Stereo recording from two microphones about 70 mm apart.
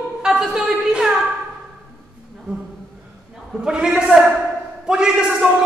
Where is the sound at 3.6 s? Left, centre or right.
Centre.